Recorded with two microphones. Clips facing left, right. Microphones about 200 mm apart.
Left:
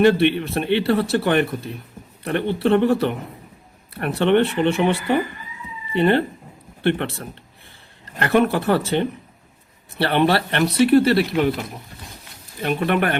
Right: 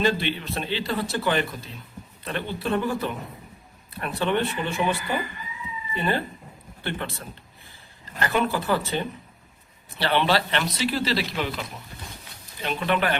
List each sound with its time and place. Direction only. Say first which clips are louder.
0.0 s speech: left 9 dB; 65° left (ahead or behind)
8.2 s speech: left 7 dB; 65° left (ahead or behind)
10.0 s speech: left 4 dB; 60° left (ahead or behind)
12.6 s speech: left 5 dB; 55° left (ahead or behind)